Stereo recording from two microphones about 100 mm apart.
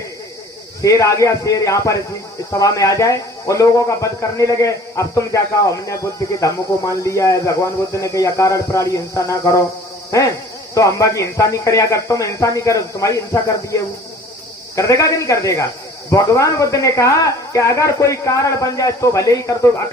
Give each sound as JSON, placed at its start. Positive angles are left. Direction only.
{"t": 0.8, "sound": "speech", "side_deg": 30}